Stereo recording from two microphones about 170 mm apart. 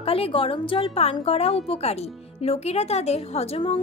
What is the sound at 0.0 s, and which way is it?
A woman's voice, 35° left (ahead or behind).